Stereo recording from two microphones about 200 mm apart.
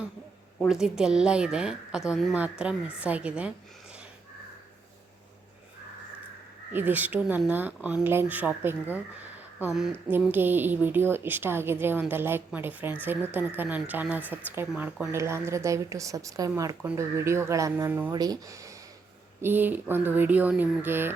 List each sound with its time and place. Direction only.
0.6 s a woman's voice: centre (ahead or behind)
6.7 s speech: 10° right (ahead or behind)